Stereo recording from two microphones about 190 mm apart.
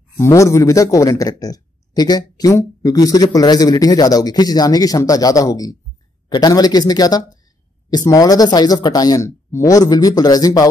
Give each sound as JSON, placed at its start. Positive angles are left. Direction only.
{"t": 0.2, "sound": "a man's voice", "side_deg": 15}